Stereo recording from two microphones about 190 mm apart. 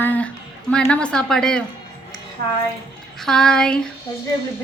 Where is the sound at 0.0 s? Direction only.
10° left (ahead or behind).